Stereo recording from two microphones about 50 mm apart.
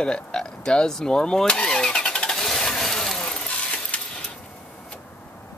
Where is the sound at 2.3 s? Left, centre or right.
Centre.